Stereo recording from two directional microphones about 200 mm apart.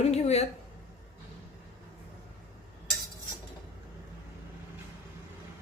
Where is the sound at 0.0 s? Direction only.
30° left (ahead or behind).